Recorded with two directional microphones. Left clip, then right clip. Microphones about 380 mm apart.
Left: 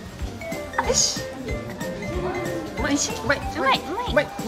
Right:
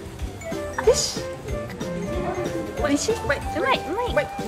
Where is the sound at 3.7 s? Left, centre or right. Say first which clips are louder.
Left 1 dB; centre.